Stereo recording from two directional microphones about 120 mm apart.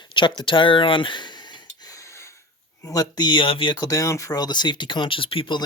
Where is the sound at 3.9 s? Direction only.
25° left (ahead or behind); by 5.6 s 45° left (ahead or behind).